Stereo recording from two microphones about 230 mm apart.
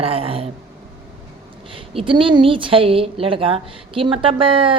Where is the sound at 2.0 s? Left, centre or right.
Right.